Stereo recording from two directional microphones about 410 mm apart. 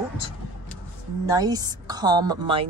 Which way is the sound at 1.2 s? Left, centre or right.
Centre.